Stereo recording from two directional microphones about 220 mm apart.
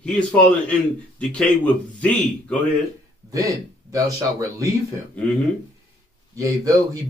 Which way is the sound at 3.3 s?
15° right (ahead or behind).